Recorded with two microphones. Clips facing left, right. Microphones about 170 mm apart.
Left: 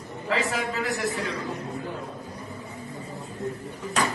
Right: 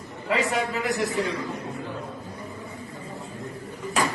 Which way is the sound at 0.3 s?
15° right (ahead or behind).